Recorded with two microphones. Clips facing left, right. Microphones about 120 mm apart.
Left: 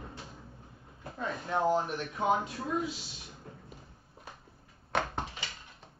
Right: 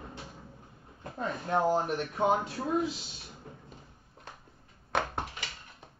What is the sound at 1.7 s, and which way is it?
Speech, 35° right (ahead or behind).